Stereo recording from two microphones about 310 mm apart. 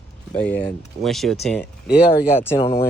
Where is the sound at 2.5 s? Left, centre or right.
Centre.